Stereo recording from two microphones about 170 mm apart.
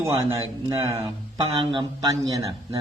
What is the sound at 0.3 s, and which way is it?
A man's voice, 15° right (ahead or behind).